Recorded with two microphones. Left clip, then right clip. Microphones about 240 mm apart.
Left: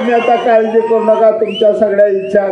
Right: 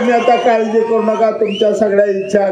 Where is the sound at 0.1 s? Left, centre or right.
Right.